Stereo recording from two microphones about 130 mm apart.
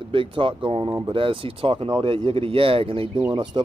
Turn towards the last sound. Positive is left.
turn(degrees=-35)  # may be behind; listen again after turning